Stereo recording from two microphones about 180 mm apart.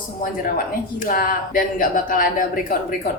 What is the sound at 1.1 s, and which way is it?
Speech, 50° left (ahead or behind).